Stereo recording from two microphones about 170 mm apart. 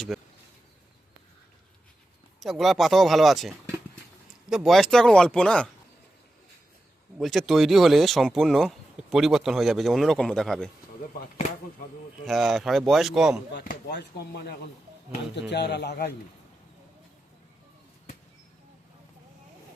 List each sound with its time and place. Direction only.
0.1 s a sound: centre (ahead or behind)
2.4 s speech: centre (ahead or behind)
7.2 s speech: centre (ahead or behind)
12.2 s speech: centre (ahead or behind)
13.8 s speech: 75° left (ahead or behind)